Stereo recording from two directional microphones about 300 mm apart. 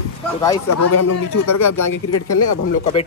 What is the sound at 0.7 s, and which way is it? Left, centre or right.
A man's voice, left.